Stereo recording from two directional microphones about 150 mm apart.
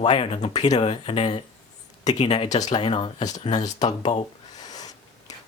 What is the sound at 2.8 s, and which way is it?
Speech, 35° left (ahead or behind).